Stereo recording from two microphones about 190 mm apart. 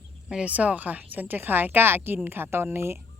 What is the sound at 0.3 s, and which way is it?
Speech, 5° right (ahead or behind).